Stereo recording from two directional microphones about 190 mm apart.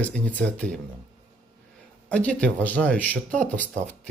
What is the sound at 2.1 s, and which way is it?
Speech, 5° left (ahead or behind).